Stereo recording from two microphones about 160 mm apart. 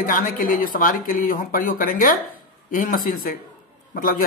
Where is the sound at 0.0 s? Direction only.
60° left (ahead or behind).